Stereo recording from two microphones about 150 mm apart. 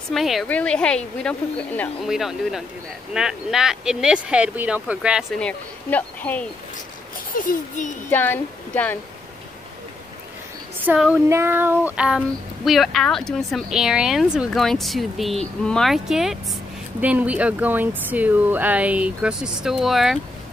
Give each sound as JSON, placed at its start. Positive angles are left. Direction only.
{"t": 0.1, "sound": "speech", "side_deg": 0}
{"t": 2.0, "sound": "speech", "side_deg": 0}
{"t": 5.4, "sound": "speech", "side_deg": 10}
{"t": 7.3, "sound": "a child's voice", "side_deg": 60}
{"t": 8.1, "sound": "speech", "side_deg": 15}
{"t": 10.9, "sound": "speech", "side_deg": -5}
{"t": 11.2, "sound": "speech", "side_deg": -15}